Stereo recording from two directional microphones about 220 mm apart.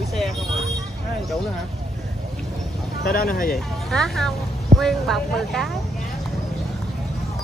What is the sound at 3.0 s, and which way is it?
Speech, 40° left (ahead or behind).